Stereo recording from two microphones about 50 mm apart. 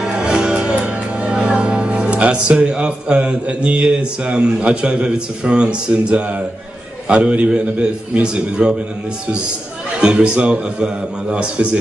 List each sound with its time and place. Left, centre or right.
0.2 s music: centre
2.4 s speech: centre
9.9 s speech: centre